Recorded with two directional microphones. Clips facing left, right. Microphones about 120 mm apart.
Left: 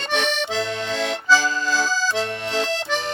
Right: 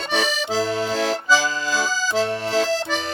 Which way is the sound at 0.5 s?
40° right (ahead or behind).